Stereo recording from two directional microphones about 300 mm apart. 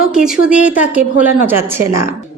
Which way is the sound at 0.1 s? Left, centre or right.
Centre.